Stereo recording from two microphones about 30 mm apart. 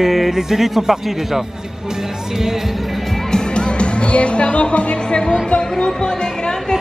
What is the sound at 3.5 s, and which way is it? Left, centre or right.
Speech, left.